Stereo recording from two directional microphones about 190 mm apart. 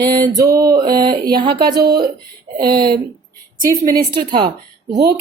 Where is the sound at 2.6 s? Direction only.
25° right (ahead or behind).